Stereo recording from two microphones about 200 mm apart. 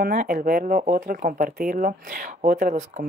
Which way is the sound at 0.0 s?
45° right (ahead or behind).